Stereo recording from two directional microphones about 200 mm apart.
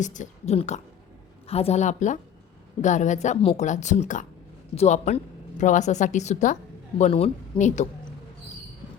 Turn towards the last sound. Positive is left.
turn(degrees=35)  # may be behind; listen again after turning